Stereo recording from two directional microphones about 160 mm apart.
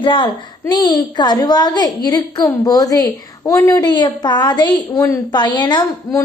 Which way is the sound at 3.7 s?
25° left (ahead or behind).